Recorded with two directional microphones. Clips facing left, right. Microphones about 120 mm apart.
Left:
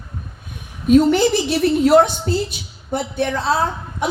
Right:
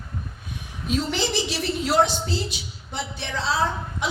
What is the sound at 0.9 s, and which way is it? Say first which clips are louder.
A woman's voice: left 13 dB; 50° left (ahead or behind).